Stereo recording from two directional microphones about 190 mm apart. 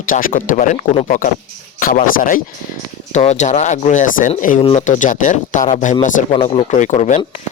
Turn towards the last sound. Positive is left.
turn(degrees=40)  # may be behind; listen again after turning